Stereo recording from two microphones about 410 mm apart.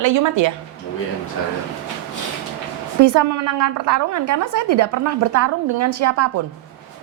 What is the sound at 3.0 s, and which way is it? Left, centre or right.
A woman's voice, right.